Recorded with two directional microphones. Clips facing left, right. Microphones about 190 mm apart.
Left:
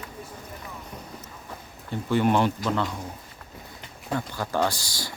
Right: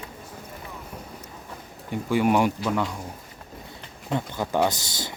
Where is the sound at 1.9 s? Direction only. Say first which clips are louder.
Right 1 dB; 10° right (ahead or behind).